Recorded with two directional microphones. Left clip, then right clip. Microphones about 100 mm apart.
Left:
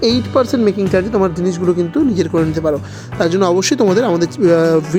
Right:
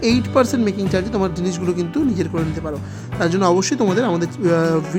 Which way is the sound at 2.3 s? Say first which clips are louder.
Left 9 dB; 35° left (ahead or behind).